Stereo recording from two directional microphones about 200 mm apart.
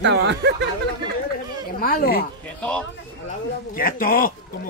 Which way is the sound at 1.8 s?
45° left (ahead or behind).